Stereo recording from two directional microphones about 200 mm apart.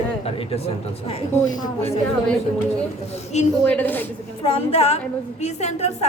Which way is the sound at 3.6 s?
5° left (ahead or behind).